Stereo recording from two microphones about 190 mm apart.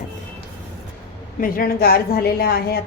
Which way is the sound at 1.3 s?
50° left (ahead or behind).